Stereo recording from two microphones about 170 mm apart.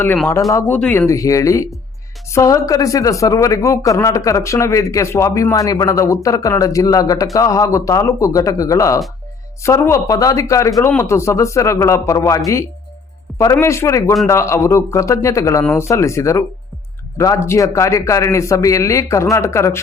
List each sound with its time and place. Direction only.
0.5 s a man's voice: 10° left (ahead or behind)
13.4 s a man's voice: 15° left (ahead or behind)